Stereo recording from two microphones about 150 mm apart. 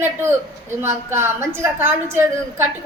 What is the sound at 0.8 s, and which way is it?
A woman's voice, 15° right (ahead or behind).